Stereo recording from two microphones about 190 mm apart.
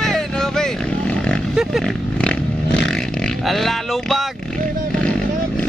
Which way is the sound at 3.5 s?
Centre (ahead or behind).